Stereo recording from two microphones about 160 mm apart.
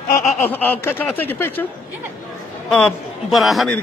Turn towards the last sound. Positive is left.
turn(degrees=0)  # may be behind; listen again after turning